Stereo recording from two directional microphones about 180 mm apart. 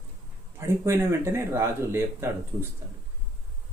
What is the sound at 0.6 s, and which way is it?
Speech, 15° right (ahead or behind).